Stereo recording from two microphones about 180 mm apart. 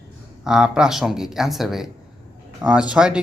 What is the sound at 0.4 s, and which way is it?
Speech, 5° right (ahead or behind).